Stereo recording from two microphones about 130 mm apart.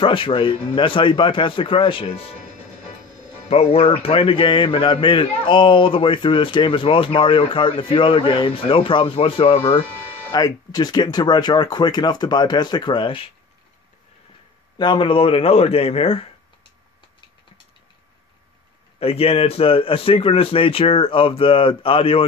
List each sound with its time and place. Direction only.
0.0 s speech: 40° left (ahead or behind)
3.4 s a man's voice: 50° left (ahead or behind)
10.3 s speech: 30° left (ahead or behind)
14.8 s a man's voice: 40° left (ahead or behind)
18.9 s a man's voice: 50° left (ahead or behind)